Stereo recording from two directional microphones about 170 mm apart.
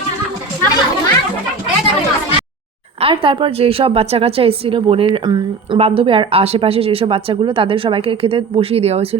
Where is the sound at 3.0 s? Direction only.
30° right (ahead or behind).